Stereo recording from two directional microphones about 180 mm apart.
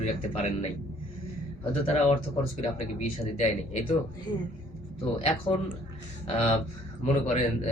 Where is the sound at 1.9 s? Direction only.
35° left (ahead or behind).